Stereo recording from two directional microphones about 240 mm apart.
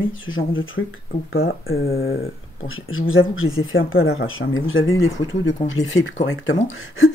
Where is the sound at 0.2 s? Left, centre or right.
Left.